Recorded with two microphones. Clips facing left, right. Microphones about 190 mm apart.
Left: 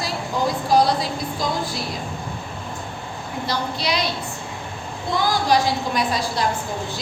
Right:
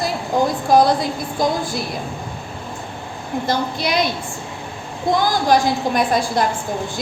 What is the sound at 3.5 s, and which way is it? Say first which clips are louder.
Speech: right 3 dB; 50° right (ahead or behind).